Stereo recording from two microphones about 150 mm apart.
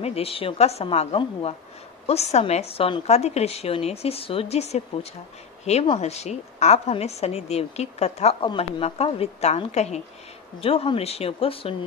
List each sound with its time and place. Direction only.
0.0 s a woman's voice: 40° left (ahead or behind)
5.9 s a woman's voice: 45° left (ahead or behind)